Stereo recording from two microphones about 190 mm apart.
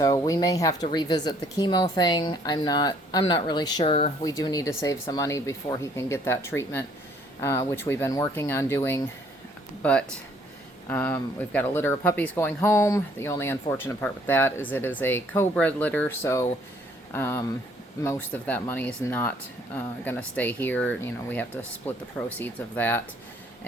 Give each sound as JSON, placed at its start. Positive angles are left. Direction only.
{"t": 0.0, "sound": "speech", "side_deg": 20}
{"t": 4.2, "sound": "speech", "side_deg": 20}